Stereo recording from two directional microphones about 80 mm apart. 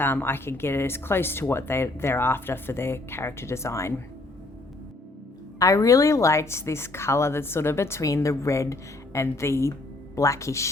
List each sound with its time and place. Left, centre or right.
0.0 s a woman's voice: left
5.5 s a woman's voice: left